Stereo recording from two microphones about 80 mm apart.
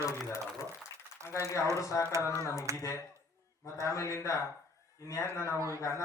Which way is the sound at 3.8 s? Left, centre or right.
Left.